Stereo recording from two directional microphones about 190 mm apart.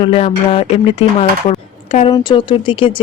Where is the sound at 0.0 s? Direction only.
30° left (ahead or behind).